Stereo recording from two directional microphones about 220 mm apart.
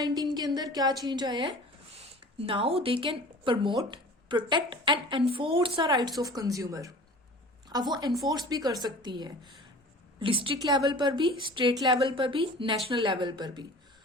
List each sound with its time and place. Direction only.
0.0 s a woman's voice: 20° right (ahead or behind)